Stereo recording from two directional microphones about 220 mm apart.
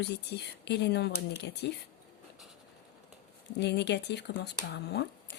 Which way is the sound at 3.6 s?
50° left (ahead or behind).